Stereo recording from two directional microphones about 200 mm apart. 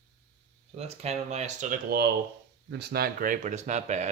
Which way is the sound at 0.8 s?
30° right (ahead or behind).